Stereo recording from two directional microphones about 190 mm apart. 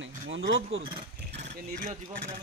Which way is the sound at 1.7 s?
40° right (ahead or behind).